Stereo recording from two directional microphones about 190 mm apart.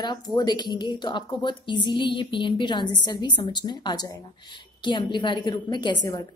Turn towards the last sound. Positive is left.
turn(degrees=20)  # may be behind; listen again after turning